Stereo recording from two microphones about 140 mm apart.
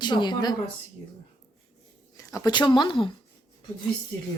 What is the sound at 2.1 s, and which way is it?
Speech, 25° left (ahead or behind).